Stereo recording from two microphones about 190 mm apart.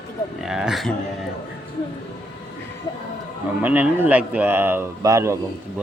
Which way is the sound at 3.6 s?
10° right (ahead or behind).